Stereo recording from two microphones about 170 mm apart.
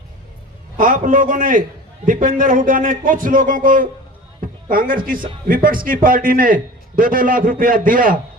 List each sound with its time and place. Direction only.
0.8 s a man's voice: 50° right (ahead or behind)